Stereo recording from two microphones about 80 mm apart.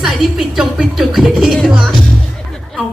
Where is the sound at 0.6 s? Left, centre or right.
Centre.